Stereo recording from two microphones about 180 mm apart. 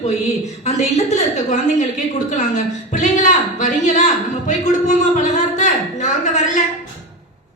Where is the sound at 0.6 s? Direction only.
40° left (ahead or behind).